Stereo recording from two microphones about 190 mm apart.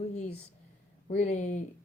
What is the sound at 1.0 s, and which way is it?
Speech, 35° left (ahead or behind).